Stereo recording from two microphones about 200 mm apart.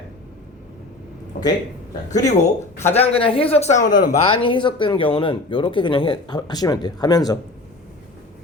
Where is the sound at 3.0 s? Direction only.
25° left (ahead or behind).